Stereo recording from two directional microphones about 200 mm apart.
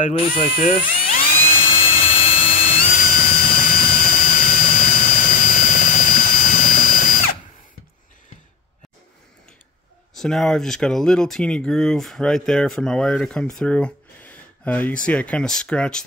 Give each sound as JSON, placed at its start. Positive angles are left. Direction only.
{"t": 0.0, "sound": "drill", "side_deg": 40}
{"t": 10.1, "sound": "speech", "side_deg": 0}